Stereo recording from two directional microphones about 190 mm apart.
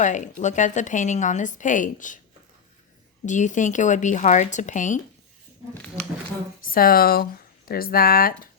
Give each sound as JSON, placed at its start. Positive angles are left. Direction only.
{"t": 0.0, "sound": "a woman's voice", "side_deg": 40}
{"t": 3.2, "sound": "a woman's voice", "side_deg": 40}
{"t": 5.7, "sound": "speech", "side_deg": 5}
{"t": 6.7, "sound": "speech", "side_deg": 50}